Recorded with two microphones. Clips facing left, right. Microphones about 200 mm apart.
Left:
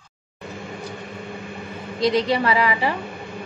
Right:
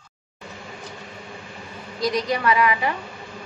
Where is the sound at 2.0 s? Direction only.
30° left (ahead or behind).